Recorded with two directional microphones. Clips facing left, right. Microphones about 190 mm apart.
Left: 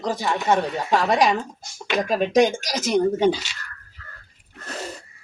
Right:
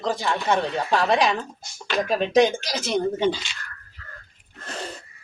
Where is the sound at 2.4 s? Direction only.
45° left (ahead or behind).